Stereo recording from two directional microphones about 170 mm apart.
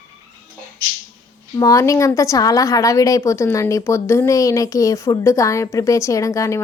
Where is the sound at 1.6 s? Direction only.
20° left (ahead or behind).